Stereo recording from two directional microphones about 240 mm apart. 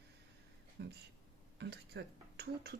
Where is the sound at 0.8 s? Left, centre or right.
Right.